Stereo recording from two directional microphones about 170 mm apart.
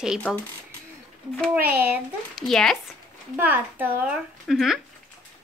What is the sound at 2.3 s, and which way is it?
Speech, centre (ahead or behind).